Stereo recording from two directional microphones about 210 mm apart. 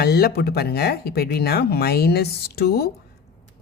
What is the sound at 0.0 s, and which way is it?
Speech, 50° left (ahead or behind).